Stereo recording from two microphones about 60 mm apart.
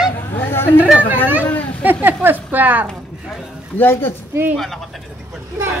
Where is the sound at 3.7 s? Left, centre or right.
Left.